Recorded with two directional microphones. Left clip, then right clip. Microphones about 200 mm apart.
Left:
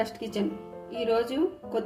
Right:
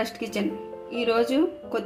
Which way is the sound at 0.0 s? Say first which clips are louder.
Right 2 dB; 25° right (ahead or behind).